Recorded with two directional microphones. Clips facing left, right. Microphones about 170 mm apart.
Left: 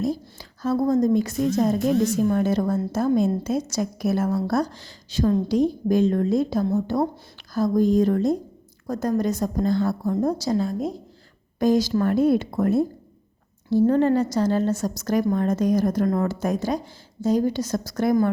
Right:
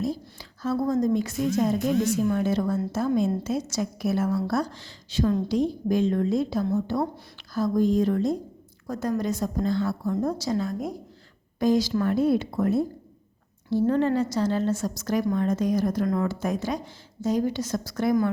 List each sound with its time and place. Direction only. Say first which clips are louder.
0.0 s a woman's voice: left 3 dB; 45° left (ahead or behind); by 11.0 s 25° left (ahead or behind)
11.6 s a woman's voice: left 2 dB; 45° left (ahead or behind)